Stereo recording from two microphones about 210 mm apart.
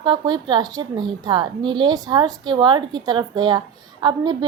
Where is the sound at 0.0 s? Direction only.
20° right (ahead or behind).